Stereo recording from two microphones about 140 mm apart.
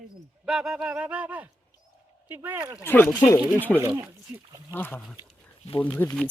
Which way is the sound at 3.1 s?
25° left (ahead or behind).